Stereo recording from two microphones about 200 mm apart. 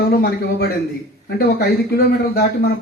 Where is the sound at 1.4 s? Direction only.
50° left (ahead or behind).